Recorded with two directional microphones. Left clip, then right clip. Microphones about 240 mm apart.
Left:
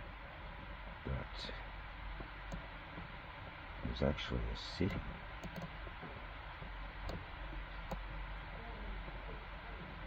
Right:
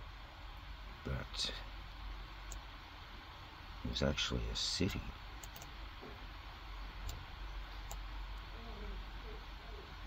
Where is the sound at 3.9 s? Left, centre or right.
Centre.